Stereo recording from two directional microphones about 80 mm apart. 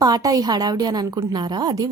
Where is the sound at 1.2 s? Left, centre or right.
Right.